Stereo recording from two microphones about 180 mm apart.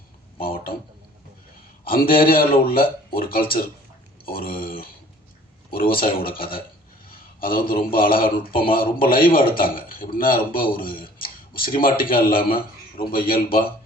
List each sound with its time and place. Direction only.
0.4 s speech: 55° left (ahead or behind)
1.8 s speech: 55° left (ahead or behind)